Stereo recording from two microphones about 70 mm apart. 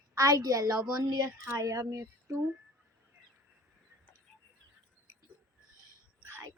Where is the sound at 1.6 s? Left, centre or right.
Right.